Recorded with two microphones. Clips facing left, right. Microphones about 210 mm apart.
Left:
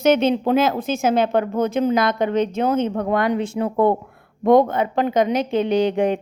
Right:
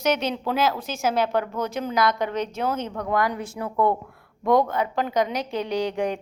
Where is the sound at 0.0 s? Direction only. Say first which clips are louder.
Left 8 dB; 25° left (ahead or behind).